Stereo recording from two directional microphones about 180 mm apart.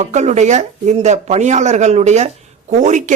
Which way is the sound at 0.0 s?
40° right (ahead or behind).